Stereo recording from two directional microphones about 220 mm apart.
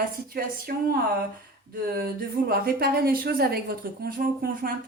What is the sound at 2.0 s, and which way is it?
A woman's voice, 45° right (ahead or behind).